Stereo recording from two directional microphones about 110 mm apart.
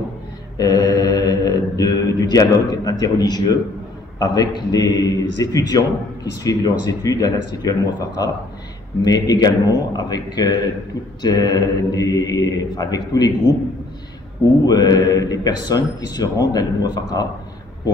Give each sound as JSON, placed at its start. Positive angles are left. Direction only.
{"t": 0.6, "sound": "mantra", "side_deg": 35}
{"t": 4.2, "sound": "speech", "side_deg": 40}
{"t": 14.6, "sound": "speech", "side_deg": 35}